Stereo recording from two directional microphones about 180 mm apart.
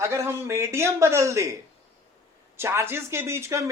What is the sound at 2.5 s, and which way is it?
Speech, 15° right (ahead or behind).